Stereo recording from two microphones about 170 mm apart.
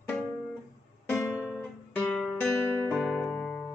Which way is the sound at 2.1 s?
5° left (ahead or behind).